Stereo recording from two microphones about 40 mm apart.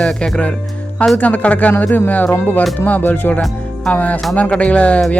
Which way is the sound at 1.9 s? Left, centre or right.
Left.